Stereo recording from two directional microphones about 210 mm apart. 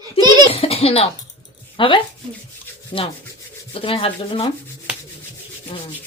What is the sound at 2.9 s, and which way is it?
Rub, 30° left (ahead or behind).